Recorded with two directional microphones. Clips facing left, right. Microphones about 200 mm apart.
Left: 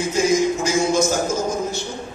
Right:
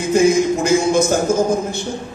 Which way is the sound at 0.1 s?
55° right (ahead or behind).